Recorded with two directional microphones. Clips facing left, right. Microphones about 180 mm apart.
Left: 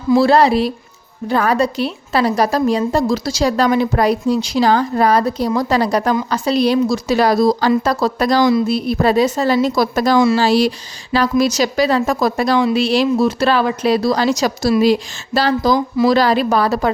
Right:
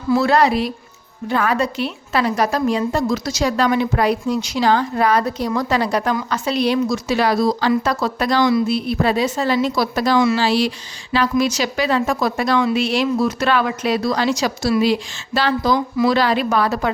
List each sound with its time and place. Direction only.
0.2 s a woman's voice: 30° left (ahead or behind)